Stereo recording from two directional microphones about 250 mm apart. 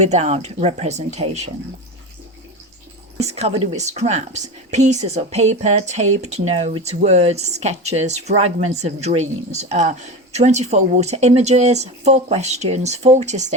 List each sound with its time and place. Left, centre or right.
0.0 s a woman's voice: right
3.2 s a woman's voice: right